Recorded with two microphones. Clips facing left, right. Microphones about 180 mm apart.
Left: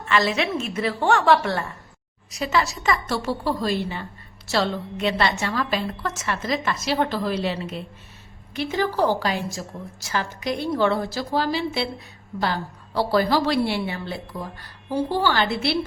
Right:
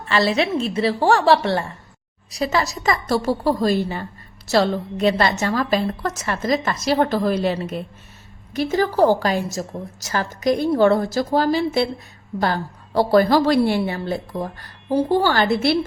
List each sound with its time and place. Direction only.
0.0 s a woman's voice: 35° right (ahead or behind)